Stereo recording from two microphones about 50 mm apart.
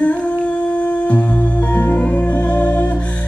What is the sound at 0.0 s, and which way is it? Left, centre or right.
Music, left.